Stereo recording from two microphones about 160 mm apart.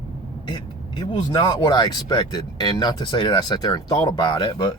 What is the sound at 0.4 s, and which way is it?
Speech, 30° left (ahead or behind).